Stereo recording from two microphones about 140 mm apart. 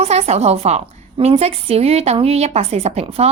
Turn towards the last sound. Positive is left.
turn(degrees=-45)  # may be behind; listen again after turning